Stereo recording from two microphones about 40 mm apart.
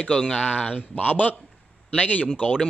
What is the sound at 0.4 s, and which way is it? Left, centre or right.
Speech, left.